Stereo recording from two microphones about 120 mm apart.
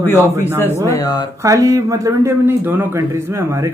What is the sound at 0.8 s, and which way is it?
Speech, 30° left (ahead or behind).